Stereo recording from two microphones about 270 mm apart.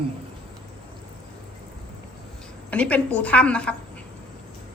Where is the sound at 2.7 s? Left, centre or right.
Centre.